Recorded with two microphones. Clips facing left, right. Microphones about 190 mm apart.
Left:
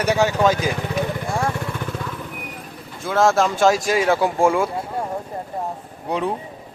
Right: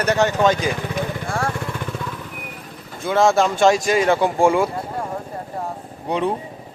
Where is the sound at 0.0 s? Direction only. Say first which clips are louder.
Even; 10° left (ahead or behind).